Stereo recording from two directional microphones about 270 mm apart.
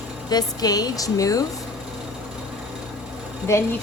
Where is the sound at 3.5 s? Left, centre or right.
Centre.